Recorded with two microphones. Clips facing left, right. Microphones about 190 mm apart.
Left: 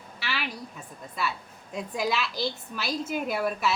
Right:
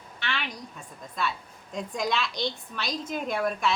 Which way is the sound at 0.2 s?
5° left (ahead or behind).